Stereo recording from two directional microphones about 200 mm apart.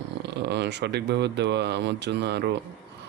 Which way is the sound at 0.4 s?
60° right (ahead or behind).